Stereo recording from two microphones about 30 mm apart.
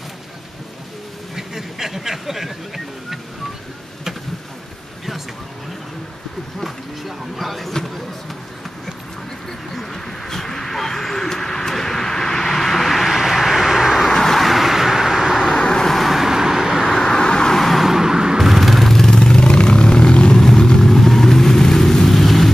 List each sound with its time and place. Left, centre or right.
1.3 s music: centre
6.6 s a sound: centre
9.8 s vehicle: centre
14.0 s vehicle: centre
14.4 s vehicle: centre
15.6 s vehicle: left
16.1 s vehicle: centre
16.8 s vehicle: centre
17.1 s vehicle: left
17.6 s vehicle: centre
17.8 s a sound: centre
18.4 s a sound: centre
18.9 s vehicle: centre
20.3 s vehicle: centre